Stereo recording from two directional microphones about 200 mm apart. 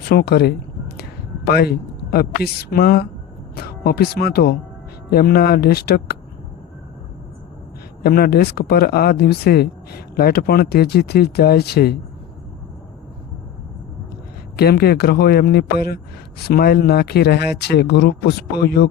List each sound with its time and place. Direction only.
0.1 s speech: 55° left (ahead or behind)
8.0 s speech: 50° left (ahead or behind)
14.5 s speech: 50° left (ahead or behind)